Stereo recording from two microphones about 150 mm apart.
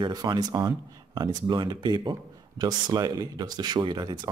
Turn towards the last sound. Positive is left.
turn(degrees=-30)  # may be behind; listen again after turning